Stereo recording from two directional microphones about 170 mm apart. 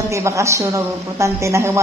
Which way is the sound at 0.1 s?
15° right (ahead or behind).